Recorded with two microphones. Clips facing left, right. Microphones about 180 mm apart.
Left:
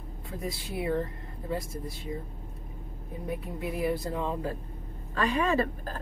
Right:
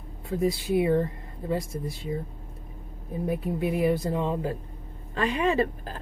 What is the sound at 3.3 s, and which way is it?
Speech, 25° right (ahead or behind).